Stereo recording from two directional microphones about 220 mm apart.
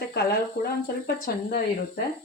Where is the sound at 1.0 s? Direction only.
45° left (ahead or behind).